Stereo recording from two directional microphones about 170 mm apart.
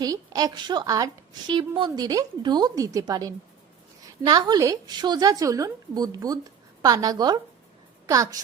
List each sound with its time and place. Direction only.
0.0 s a woman's voice: 20° right (ahead or behind)